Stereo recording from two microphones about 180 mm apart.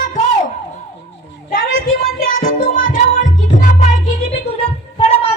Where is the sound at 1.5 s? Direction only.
50° left (ahead or behind).